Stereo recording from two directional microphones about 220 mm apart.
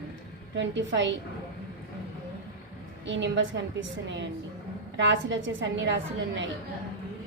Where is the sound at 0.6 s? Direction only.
55° right (ahead or behind).